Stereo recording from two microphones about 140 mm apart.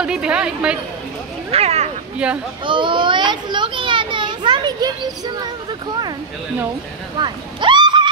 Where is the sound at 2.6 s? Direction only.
35° right (ahead or behind).